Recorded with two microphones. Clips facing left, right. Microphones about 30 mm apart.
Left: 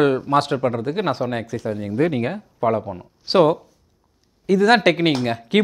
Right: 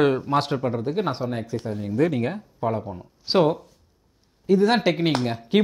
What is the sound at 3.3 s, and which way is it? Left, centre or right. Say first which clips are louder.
Speech: left 4 dB; centre.